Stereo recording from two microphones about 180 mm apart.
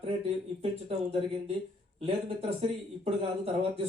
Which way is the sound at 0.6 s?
35° right (ahead or behind).